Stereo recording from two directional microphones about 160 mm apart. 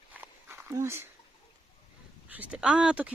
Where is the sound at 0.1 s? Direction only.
10° right (ahead or behind).